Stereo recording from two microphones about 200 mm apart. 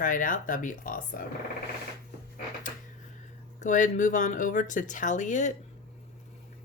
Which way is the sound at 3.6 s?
40° left (ahead or behind).